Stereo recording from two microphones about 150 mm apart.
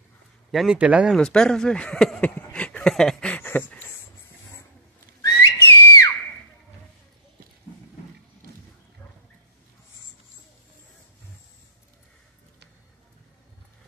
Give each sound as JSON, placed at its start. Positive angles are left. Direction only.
{"t": 0.5, "sound": "speech", "side_deg": 0}
{"t": 1.1, "sound": "speech", "side_deg": 5}
{"t": 2.5, "sound": "a sound", "side_deg": 10}
{"t": 5.2, "sound": "whistle", "side_deg": 20}